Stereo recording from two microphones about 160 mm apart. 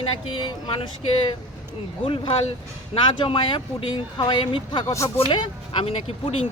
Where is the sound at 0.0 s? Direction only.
35° left (ahead or behind).